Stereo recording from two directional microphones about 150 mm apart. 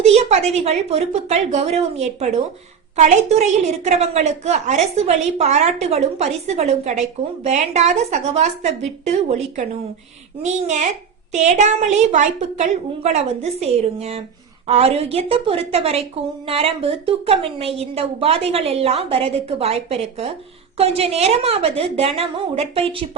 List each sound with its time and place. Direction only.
0.0 s a woman's voice: 45° right (ahead or behind)